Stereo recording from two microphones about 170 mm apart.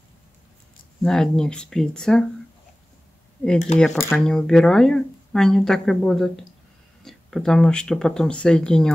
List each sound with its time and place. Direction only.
1.0 s speech: 5° left (ahead or behind)
3.5 s speech: 45° left (ahead or behind)
4.2 s speech: 5° left (ahead or behind)